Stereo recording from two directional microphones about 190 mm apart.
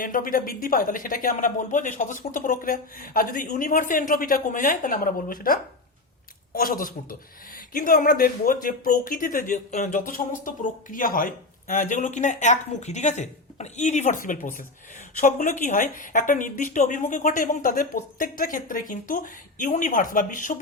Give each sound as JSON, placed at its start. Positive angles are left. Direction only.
{"t": 0.0, "sound": "speech", "side_deg": 45}